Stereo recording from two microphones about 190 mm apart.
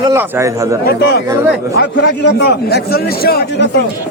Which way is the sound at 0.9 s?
55° left (ahead or behind).